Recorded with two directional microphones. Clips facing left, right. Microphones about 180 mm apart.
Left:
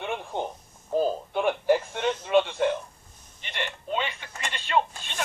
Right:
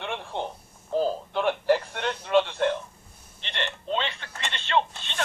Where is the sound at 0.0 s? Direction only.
10° left (ahead or behind).